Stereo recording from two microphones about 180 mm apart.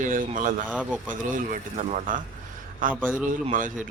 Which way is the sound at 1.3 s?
45° right (ahead or behind).